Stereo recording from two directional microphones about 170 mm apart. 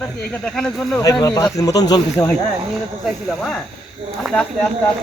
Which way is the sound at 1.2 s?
20° left (ahead or behind).